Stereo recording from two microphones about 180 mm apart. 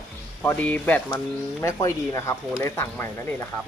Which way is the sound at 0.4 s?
10° left (ahead or behind).